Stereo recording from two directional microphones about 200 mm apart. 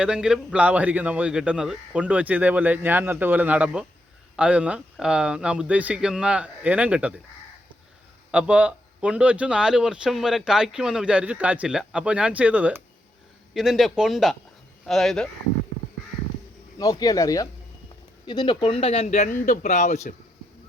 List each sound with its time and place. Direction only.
0.0 s a man's voice: 5° right (ahead or behind)
8.3 s a man's voice: 5° right (ahead or behind)
16.7 s speech: 20° left (ahead or behind); by 20.1 s 35° left (ahead or behind)